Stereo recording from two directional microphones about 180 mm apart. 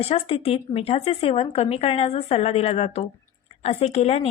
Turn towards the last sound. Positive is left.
turn(degrees=35)  # may be behind; listen again after turning